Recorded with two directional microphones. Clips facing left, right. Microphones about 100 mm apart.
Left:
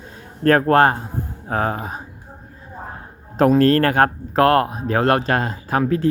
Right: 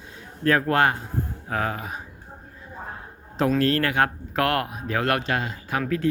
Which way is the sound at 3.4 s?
45° left (ahead or behind).